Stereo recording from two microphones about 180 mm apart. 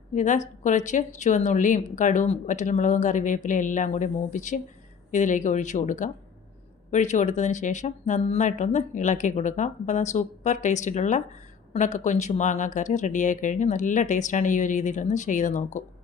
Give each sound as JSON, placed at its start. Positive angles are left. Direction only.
{"t": 0.1, "sound": "a woman's voice", "side_deg": 45}